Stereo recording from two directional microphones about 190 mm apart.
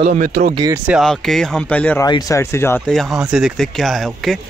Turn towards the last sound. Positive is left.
turn(degrees=0)  # may be behind; listen again after turning